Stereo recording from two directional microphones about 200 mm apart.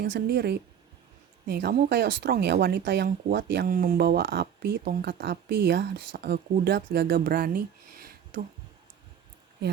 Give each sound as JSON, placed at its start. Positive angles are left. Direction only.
{"t": 0.0, "sound": "speech", "side_deg": -55}